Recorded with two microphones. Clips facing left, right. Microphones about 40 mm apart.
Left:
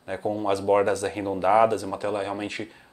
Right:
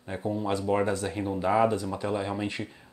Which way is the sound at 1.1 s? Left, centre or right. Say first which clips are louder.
Left 5 dB; left.